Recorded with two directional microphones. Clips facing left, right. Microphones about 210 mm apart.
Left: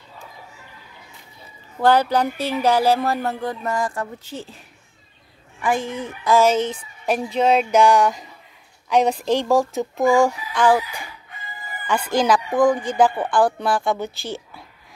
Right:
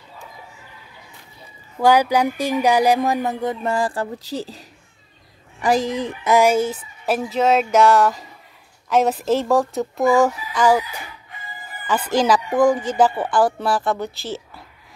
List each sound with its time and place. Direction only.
1.8 s speech: 10° right (ahead or behind); by 6.1 s 35° right (ahead or behind)
6.2 s speech: 15° right (ahead or behind)